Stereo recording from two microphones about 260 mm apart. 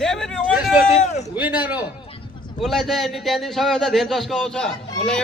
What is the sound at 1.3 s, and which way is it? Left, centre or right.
A man's voice, centre.